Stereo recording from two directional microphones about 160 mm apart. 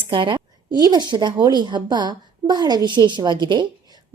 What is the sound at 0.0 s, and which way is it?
A woman's voice, 30° right (ahead or behind).